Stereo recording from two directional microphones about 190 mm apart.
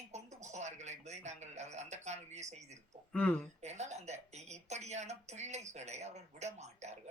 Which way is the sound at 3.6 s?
35° right (ahead or behind).